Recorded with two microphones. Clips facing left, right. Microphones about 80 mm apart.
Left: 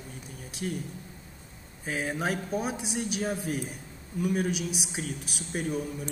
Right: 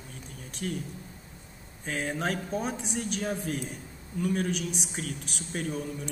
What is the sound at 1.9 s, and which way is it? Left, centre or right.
A man's voice, centre.